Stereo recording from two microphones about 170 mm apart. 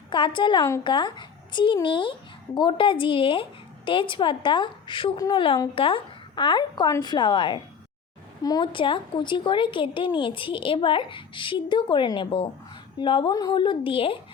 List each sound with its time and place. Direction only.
0.1 s a woman's voice: 30° left (ahead or behind)